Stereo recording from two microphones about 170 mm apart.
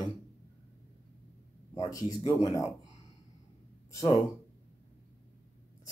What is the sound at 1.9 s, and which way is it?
Speech, 20° left (ahead or behind).